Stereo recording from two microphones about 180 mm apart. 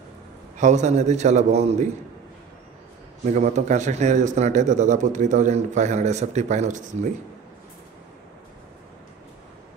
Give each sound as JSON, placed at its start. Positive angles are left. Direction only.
{"t": 0.6, "sound": "a man's voice", "side_deg": -40}
{"t": 3.3, "sound": "a man's voice", "side_deg": -40}